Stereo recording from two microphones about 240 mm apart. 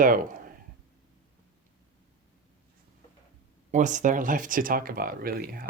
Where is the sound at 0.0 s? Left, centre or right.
Right.